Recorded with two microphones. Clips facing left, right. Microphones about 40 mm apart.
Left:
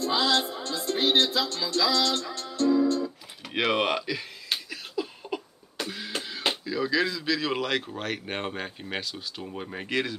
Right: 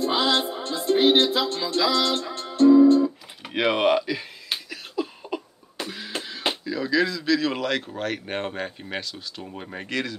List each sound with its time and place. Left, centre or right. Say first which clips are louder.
0.0 s music: right 3 dB; right
3.7 s a sound: right 5 dB; centre
6.6 s speech: right 4 dB; centre
9.8 s speech: even; centre